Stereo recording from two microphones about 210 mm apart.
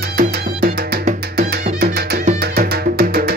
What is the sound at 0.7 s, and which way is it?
Music, 45° right (ahead or behind).